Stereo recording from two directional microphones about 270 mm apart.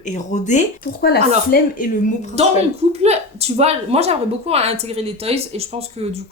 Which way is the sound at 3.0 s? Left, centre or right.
Right.